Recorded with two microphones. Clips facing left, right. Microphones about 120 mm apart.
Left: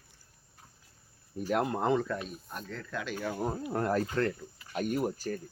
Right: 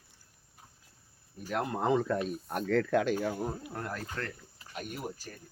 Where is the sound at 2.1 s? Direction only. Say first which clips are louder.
Right 5 dB; 45° right (ahead or behind).